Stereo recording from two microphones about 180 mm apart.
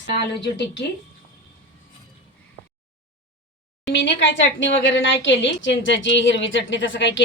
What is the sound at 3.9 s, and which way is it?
A woman's voice, 85° left.